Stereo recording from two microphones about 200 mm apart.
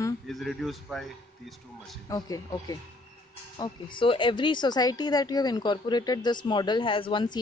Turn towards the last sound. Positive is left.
turn(degrees=25)  # may be behind; listen again after turning